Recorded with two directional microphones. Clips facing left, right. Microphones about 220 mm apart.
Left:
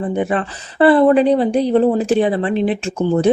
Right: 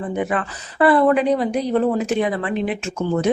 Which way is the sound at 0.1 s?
30° left (ahead or behind).